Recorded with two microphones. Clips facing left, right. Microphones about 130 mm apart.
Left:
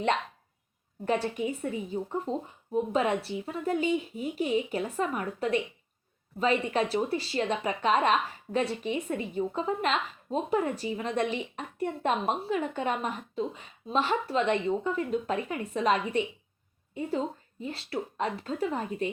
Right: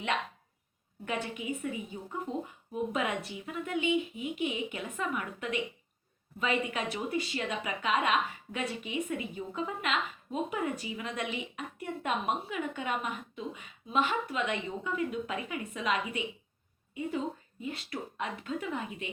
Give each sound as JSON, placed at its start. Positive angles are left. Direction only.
{"t": 1.0, "sound": "a woman's voice", "side_deg": 35}